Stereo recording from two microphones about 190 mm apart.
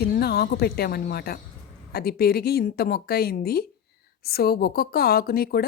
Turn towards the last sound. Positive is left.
turn(degrees=55)  # may be behind; listen again after turning